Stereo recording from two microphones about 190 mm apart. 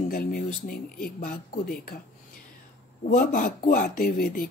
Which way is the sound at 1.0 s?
50° left (ahead or behind).